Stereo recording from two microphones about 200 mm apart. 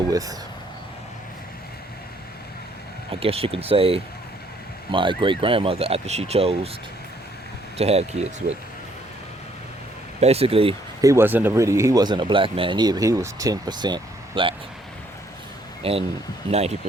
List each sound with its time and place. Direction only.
0.1 s speech: 15° right (ahead or behind)
3.2 s speech: 30° right (ahead or behind)
7.8 s speech: 30° right (ahead or behind)
10.2 s speech: 30° right (ahead or behind)
11.0 s speech: 15° right (ahead or behind)
15.8 s speech: 30° right (ahead or behind)